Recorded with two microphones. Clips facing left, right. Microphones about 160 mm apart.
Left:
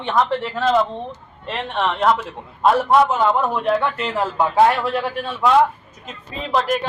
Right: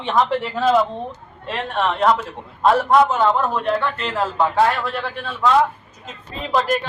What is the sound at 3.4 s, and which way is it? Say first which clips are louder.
A man's voice: left 1 dB; 10° left (ahead or behind).